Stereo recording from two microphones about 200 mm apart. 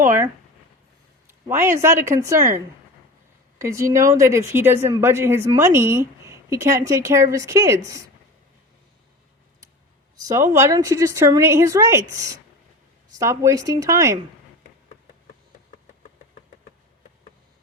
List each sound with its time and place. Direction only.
0.0 s a sound: 10° right (ahead or behind)
1.3 s speech: 10° right (ahead or behind)
3.6 s speech: 15° right (ahead or behind)
10.2 s speech: 15° right (ahead or behind)